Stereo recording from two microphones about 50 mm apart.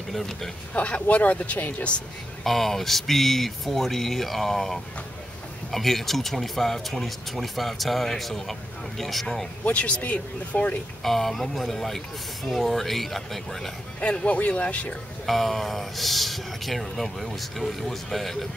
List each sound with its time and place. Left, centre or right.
0.1 s speech: centre
0.7 s speech: left
2.4 s speech: centre
9.7 s speech: left
11.0 s speech: centre
13.9 s speech: left
15.2 s speech: centre